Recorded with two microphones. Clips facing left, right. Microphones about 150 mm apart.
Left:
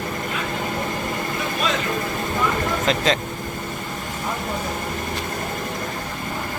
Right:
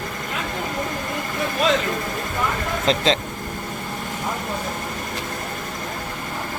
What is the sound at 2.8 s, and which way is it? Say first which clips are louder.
Speech: right 2 dB; 25° right (ahead or behind).